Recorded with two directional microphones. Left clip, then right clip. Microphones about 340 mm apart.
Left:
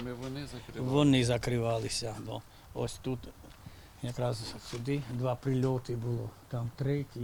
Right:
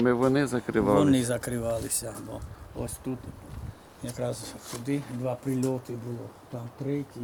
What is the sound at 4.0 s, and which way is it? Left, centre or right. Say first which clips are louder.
Speech: right 2 dB; left.